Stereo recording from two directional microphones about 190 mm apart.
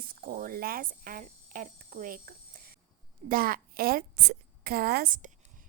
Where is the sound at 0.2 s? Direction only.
50° right (ahead or behind).